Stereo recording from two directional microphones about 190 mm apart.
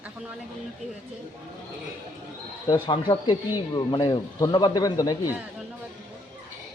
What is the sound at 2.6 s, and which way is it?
Speech, 25° left (ahead or behind).